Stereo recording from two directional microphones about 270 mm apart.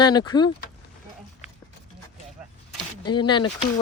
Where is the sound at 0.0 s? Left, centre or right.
Centre.